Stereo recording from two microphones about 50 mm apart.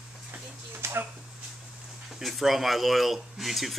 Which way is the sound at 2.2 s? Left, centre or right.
Centre.